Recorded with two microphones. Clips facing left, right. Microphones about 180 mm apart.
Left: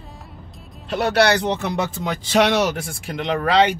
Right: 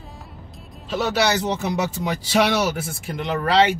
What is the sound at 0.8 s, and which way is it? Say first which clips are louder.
Speech: left 3 dB; 60° left (ahead or behind).